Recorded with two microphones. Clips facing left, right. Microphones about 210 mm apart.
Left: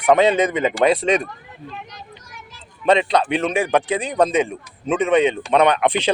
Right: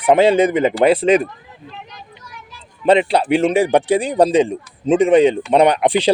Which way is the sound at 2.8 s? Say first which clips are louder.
Right 3 dB; 30° right (ahead or behind).